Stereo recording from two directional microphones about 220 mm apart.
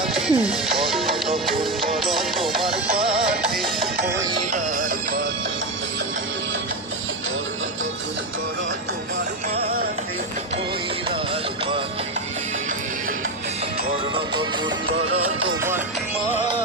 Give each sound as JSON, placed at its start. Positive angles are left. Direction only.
{"t": 0.0, "sound": "speech", "side_deg": 0}
{"t": 0.8, "sound": "music", "side_deg": 0}
{"t": 4.5, "sound": "music", "side_deg": -40}
{"t": 9.6, "sound": "music", "side_deg": -45}